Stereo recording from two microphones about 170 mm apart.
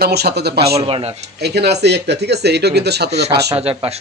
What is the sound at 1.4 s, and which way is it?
Speech, 80° right.